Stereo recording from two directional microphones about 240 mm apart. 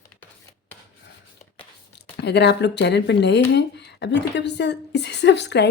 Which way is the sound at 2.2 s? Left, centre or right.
Left.